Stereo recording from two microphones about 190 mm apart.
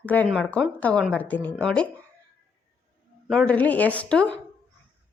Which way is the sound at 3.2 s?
5° left (ahead or behind).